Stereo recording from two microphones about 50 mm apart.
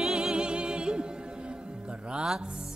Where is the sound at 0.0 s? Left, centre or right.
Centre.